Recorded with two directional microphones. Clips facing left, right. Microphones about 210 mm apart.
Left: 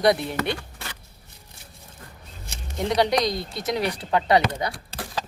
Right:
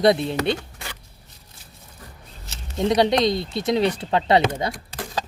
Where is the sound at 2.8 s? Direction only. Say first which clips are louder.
Right 3 dB; 25° right (ahead or behind).